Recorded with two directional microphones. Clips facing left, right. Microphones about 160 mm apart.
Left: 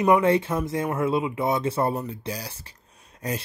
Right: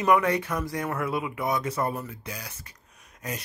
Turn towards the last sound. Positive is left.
turn(degrees=35)  # may be behind; listen again after turning